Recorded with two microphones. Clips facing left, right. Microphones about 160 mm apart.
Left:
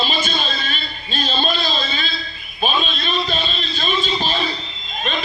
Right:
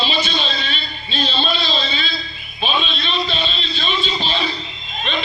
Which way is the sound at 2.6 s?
45° left (ahead or behind).